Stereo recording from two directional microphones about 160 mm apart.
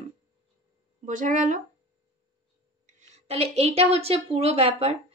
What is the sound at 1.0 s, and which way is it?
Speech, 55° right (ahead or behind).